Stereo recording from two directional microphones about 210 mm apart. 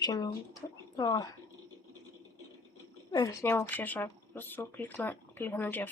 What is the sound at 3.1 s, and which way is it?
Speech, 15° left (ahead or behind).